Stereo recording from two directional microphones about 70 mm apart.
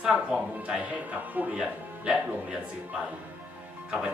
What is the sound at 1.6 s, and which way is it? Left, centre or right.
Speech, centre.